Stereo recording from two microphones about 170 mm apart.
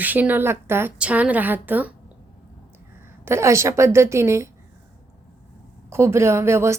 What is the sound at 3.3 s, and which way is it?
A woman's voice, 15° right (ahead or behind).